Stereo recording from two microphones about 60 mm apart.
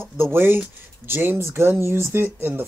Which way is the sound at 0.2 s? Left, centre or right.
Right.